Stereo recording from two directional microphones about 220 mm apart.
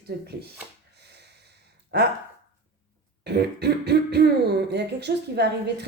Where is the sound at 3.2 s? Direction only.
50° right (ahead or behind).